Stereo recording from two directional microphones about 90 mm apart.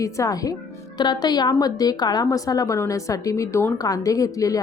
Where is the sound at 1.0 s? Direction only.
50° left (ahead or behind).